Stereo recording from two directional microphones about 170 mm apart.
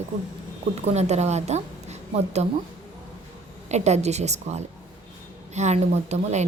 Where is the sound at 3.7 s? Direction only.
40° right (ahead or behind).